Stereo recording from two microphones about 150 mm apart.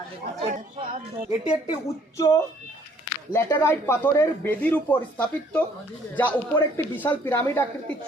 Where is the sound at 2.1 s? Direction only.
20° left (ahead or behind).